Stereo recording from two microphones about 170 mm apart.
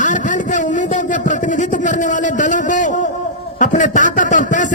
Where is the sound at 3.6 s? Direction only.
50° left (ahead or behind).